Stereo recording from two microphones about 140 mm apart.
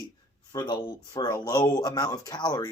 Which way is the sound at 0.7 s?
25° left (ahead or behind).